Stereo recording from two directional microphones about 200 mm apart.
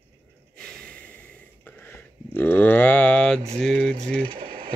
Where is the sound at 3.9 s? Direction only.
45° right (ahead or behind).